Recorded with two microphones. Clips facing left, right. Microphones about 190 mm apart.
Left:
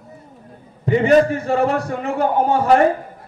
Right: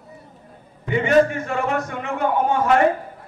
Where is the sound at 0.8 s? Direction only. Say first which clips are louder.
Left 3 dB; 35° left (ahead or behind).